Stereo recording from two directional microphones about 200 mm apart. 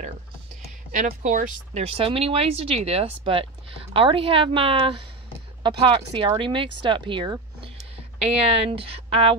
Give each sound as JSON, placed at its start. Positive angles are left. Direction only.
{"t": 0.9, "sound": "speech", "side_deg": -40}